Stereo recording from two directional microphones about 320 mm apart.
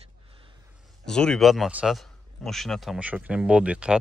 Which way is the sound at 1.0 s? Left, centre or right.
Centre.